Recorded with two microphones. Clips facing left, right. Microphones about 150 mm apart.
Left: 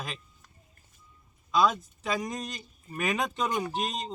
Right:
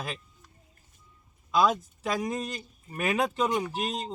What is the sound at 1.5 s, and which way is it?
Speech, 10° right (ahead or behind).